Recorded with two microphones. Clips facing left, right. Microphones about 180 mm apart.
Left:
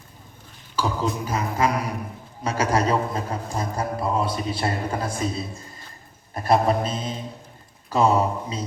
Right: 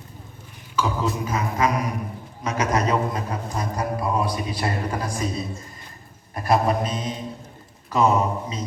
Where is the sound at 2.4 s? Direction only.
30° left (ahead or behind).